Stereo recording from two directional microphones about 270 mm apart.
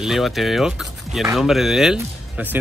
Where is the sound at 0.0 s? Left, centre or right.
Centre.